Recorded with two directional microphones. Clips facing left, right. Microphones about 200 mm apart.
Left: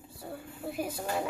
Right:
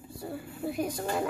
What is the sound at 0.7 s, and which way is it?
Speech, 5° left (ahead or behind).